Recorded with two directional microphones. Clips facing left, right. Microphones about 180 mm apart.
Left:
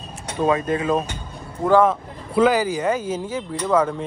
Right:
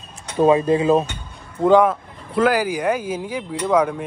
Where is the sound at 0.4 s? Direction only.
30° right (ahead or behind).